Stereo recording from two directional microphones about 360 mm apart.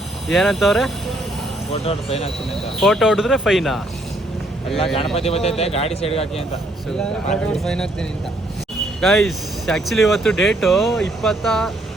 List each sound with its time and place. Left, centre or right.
0.3 s speech: centre
1.7 s a man's voice: centre
2.8 s speech: centre
5.1 s a man's voice: centre
7.4 s speech: centre
9.0 s speech: centre